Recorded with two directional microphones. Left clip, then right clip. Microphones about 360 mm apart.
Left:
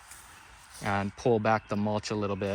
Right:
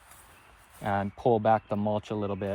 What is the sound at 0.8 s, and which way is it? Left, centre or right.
Speech, centre.